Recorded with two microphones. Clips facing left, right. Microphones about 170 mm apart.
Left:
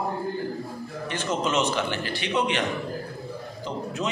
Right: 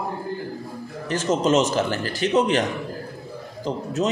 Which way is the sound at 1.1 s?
40° right (ahead or behind).